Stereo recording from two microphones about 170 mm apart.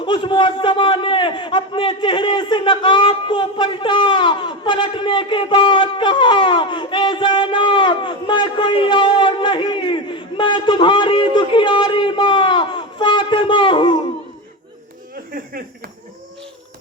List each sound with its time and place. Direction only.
0.0 s a man's voice: 30° left (ahead or behind)